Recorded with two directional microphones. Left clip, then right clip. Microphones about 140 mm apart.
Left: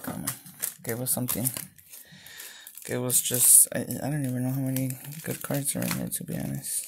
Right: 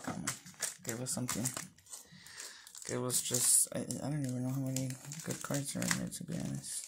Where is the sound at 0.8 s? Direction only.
50° left (ahead or behind).